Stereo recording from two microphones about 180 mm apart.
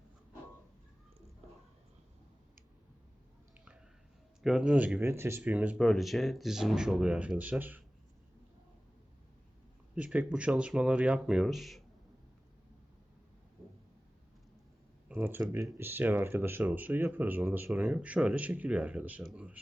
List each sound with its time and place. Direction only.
4.4 s speech: 5° right (ahead or behind)
9.9 s speech: 10° right (ahead or behind)
15.1 s speech: 10° right (ahead or behind)